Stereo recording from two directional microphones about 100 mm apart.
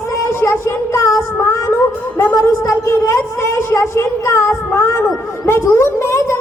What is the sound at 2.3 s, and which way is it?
Speech, 30° left (ahead or behind).